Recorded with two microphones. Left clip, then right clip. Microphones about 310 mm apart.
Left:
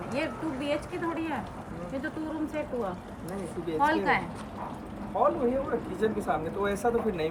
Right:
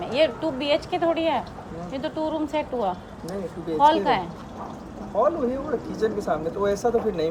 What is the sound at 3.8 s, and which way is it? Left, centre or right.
Speech, centre.